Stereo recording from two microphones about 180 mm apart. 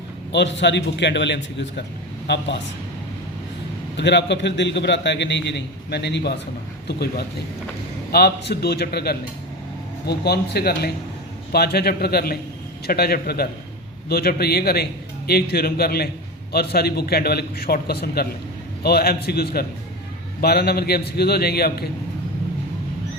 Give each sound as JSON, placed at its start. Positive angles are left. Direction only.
{"t": 0.3, "sound": "a man's voice", "side_deg": 80}
{"t": 3.9, "sound": "a man's voice", "side_deg": 75}